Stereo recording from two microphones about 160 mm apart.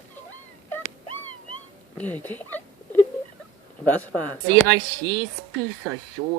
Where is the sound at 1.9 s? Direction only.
10° left (ahead or behind).